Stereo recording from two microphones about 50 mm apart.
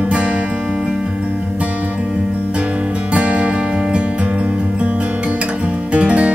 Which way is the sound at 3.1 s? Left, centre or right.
Right.